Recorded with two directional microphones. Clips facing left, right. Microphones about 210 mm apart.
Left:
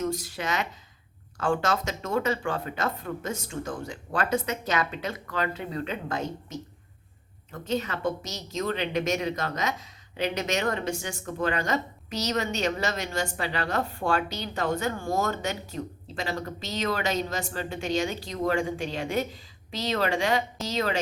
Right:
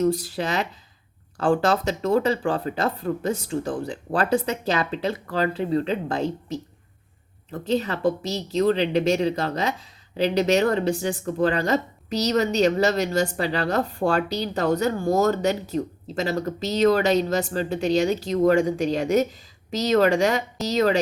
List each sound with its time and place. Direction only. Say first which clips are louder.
0.0 s a woman's voice: right 7 dB; 35° right (ahead or behind)